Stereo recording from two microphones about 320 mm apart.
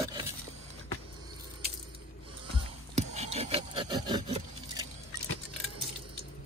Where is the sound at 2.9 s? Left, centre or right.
Centre.